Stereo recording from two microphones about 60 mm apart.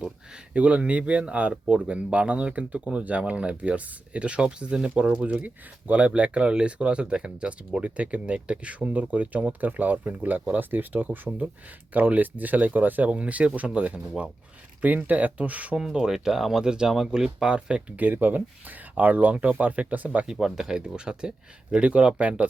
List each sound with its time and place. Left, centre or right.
0.5 s speech: right
15.8 s speech: centre; by 20.2 s right
20.2 s speech: centre